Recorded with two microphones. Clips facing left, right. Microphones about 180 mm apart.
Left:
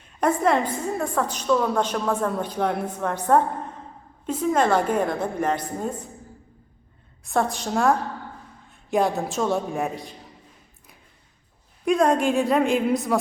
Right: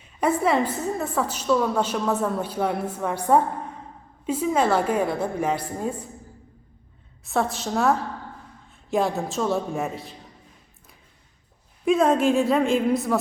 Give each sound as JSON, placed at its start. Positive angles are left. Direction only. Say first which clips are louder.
{"t": 0.2, "sound": "a woman's voice", "louder": "even", "side_deg": -10}
{"t": 7.3, "sound": "a woman's voice", "louder": "left 1 dB", "side_deg": 0}
{"t": 11.9, "sound": "a woman's voice", "louder": "right 1 dB", "side_deg": -5}